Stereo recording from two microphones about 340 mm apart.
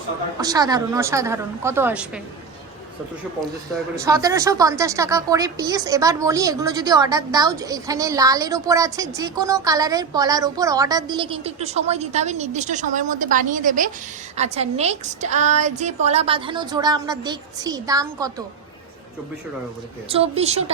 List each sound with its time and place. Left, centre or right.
0.4 s speech: centre
4.0 s a woman's voice: centre
20.1 s speech: centre